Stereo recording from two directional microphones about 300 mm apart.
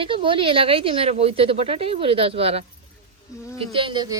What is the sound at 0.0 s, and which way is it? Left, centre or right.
Speech, centre.